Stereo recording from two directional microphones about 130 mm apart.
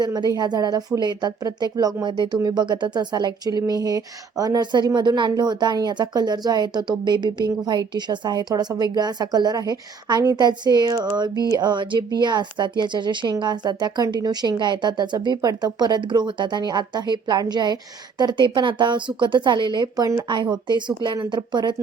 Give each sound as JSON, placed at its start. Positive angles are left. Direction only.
{"t": 0.0, "sound": "speech", "side_deg": -30}